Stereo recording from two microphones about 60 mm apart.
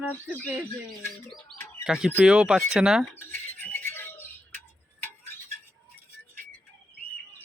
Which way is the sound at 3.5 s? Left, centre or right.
Left.